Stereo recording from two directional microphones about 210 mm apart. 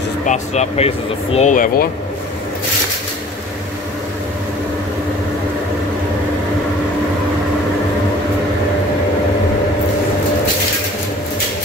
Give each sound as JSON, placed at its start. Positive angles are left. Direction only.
{"t": 0.3, "sound": "speech", "side_deg": 30}